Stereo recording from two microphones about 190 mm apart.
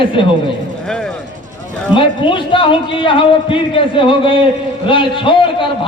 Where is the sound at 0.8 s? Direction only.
5° left (ahead or behind).